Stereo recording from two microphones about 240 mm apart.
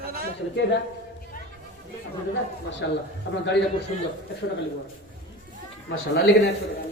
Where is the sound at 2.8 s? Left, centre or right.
Left.